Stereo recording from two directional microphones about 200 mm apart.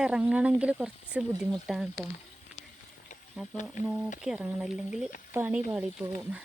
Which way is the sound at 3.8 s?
35° left (ahead or behind).